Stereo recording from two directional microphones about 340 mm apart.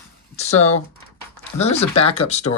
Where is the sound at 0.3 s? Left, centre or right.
Centre.